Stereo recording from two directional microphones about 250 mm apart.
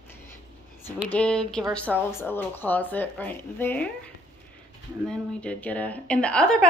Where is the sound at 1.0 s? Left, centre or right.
Centre.